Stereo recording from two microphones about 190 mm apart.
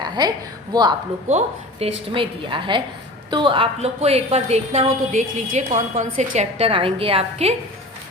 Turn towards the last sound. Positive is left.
turn(degrees=-30)  # may be behind; listen again after turning